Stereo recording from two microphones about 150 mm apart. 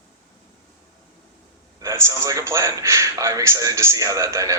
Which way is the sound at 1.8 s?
20° right (ahead or behind).